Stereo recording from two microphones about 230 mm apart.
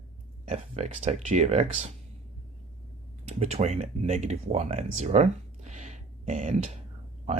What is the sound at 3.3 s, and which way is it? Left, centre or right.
Speech, right.